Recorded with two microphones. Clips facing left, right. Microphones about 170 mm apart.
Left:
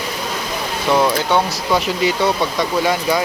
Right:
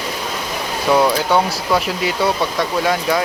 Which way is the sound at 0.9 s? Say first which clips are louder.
Right 1 dB; 5° right (ahead or behind).